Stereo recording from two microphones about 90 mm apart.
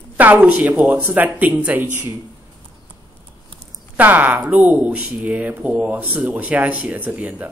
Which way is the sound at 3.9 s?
20° right (ahead or behind).